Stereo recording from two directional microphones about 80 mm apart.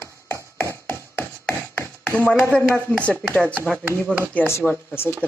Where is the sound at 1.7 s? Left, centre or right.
Left.